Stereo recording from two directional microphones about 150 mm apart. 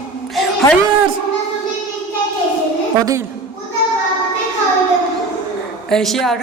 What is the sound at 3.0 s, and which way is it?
Speech, 20° right (ahead or behind).